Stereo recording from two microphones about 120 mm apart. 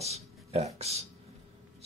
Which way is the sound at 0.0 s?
65° right (ahead or behind).